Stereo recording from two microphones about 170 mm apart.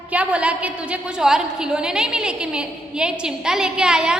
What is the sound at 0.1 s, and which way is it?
A woman's voice, 10° right (ahead or behind).